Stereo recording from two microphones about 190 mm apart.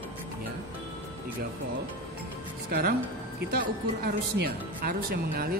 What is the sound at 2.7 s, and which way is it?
Speech, 50° right (ahead or behind).